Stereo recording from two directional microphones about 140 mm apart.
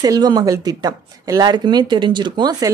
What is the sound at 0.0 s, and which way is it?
Speech, 30° right (ahead or behind).